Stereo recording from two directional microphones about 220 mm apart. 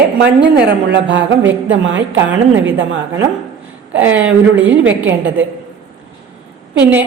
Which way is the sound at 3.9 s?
60° right (ahead or behind).